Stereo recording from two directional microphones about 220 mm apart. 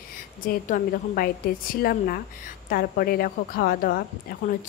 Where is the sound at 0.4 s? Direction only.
40° left (ahead or behind).